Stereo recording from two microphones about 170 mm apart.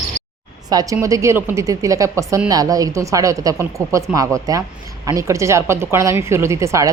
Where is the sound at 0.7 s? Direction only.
20° right (ahead or behind).